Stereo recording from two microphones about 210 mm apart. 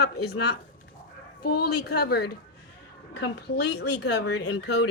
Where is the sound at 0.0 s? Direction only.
50° left (ahead or behind).